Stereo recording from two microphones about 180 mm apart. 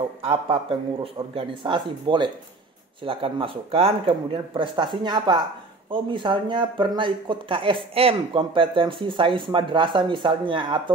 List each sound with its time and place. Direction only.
0.2 s speech: 30° right (ahead or behind)